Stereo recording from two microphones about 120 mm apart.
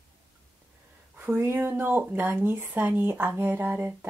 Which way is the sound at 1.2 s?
20° right (ahead or behind).